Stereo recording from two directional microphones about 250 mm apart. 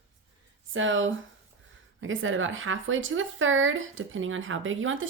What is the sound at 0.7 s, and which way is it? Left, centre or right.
Speech, right.